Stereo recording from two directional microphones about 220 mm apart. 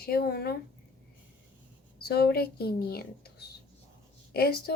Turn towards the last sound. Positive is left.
turn(degrees=45)  # may be behind; listen again after turning